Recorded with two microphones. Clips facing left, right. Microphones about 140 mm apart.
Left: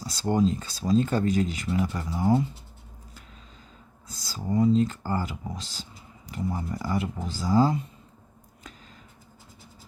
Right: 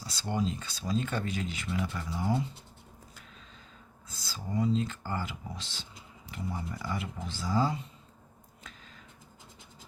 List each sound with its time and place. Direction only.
0.1 s speech: 45° left (ahead or behind)
4.1 s speech: 40° left (ahead or behind)